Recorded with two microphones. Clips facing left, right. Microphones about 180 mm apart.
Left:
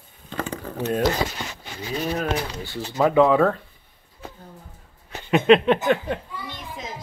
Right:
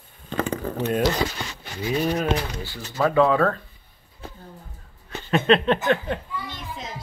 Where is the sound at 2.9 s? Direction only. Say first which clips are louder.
Left 2 dB; 15° left (ahead or behind).